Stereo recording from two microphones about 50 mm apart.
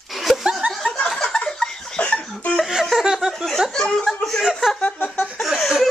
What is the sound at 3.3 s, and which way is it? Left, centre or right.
Laughter, centre.